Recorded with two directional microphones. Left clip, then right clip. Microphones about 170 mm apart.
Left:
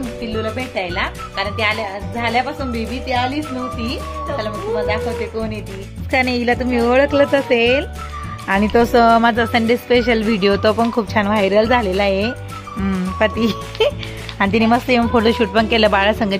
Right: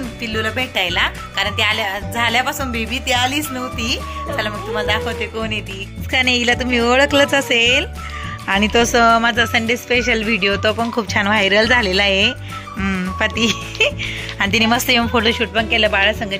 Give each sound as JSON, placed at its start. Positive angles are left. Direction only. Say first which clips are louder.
{"t": 0.2, "sound": "speech", "louder": "right 4 dB", "side_deg": 5}
{"t": 11.1, "sound": "speech", "louder": "right 1 dB", "side_deg": 5}
{"t": 13.5, "sound": "speech", "louder": "right 1 dB", "side_deg": 15}
{"t": 14.4, "sound": "speech", "louder": "even", "side_deg": 0}
{"t": 15.2, "sound": "speech", "louder": "left 2 dB", "side_deg": 25}